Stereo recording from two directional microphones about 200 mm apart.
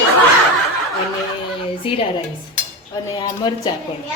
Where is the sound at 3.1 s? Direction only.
20° left (ahead or behind).